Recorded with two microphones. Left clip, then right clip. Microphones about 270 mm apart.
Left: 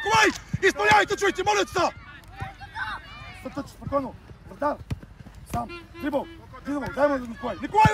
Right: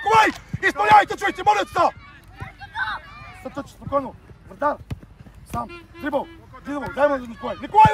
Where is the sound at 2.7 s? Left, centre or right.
Centre.